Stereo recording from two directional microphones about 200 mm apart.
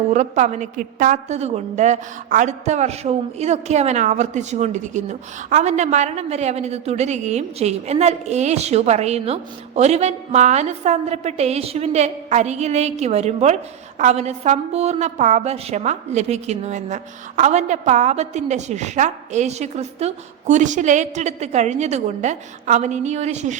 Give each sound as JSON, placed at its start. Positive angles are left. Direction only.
{"t": 0.1, "sound": "a woman's voice", "side_deg": -35}